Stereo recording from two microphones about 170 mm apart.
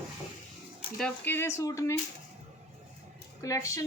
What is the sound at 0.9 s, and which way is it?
A woman's voice, 5° left (ahead or behind).